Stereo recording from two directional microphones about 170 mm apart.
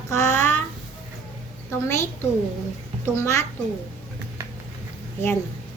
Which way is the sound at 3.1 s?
15° left (ahead or behind).